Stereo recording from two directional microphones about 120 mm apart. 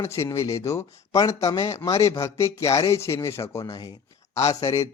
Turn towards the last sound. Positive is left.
turn(degrees=30)  # may be behind; listen again after turning